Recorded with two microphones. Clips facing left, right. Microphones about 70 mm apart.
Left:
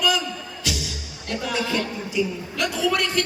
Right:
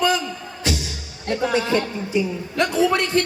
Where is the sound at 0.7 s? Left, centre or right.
Right.